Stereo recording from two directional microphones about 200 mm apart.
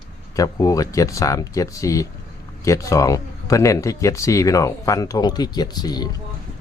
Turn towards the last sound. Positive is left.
turn(degrees=20)  # may be behind; listen again after turning